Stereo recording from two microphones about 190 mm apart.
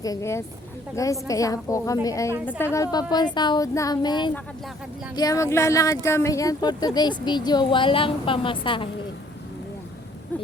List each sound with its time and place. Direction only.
0.0 s a woman's voice: 15° left (ahead or behind)